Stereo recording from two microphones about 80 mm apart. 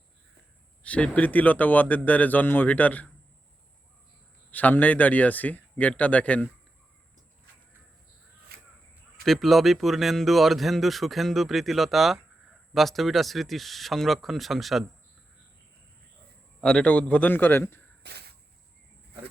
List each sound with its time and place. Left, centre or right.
0.8 s speech: centre
4.5 s speech: left
9.2 s speech: centre
16.6 s speech: centre; by 17.8 s left